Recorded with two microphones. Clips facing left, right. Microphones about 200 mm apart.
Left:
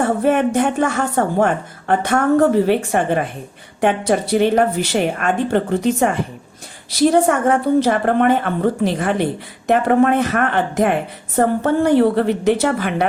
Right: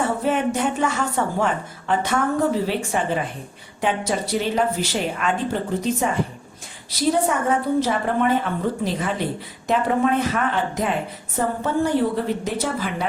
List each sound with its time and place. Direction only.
0.0 s a woman's voice: 55° left (ahead or behind)